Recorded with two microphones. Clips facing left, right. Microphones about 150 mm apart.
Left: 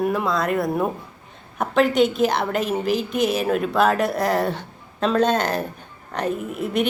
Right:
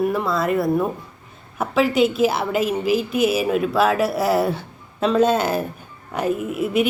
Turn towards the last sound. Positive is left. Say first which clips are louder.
# right 3 dB
turn(degrees=-5)  # may be behind; listen again after turning